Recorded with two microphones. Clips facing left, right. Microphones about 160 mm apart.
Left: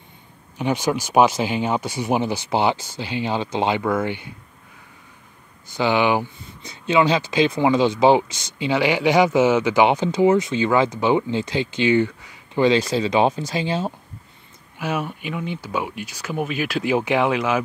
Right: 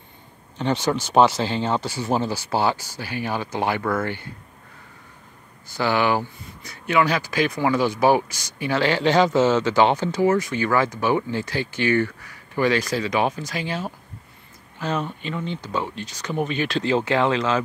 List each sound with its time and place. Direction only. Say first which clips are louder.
0.6 s speech: left 1 dB; 10° left (ahead or behind)
5.7 s speech: left 2 dB; 20° left (ahead or behind)
14.8 s speech: left 1 dB; 10° left (ahead or behind)